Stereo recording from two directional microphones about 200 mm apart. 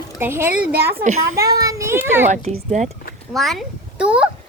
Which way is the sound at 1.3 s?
15° right (ahead or behind).